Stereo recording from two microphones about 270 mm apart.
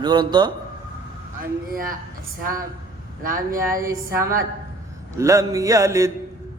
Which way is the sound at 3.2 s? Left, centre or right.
Right.